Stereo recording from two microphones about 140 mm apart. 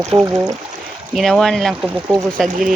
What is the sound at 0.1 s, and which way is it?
Speech, 45° right (ahead or behind).